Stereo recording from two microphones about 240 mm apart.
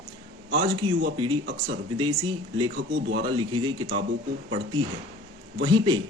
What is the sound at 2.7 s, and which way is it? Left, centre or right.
Speech, right.